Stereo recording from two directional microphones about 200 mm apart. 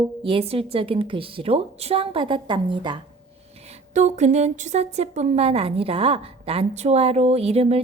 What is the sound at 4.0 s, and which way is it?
A woman's voice, 35° right (ahead or behind).